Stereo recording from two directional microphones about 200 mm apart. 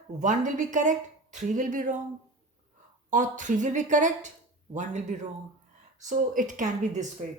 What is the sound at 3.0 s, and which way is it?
Speech, 40° right (ahead or behind).